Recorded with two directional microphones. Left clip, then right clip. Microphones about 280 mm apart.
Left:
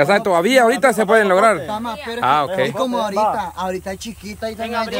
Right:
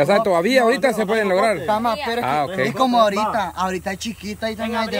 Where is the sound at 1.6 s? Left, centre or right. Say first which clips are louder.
Right 5 dB; centre.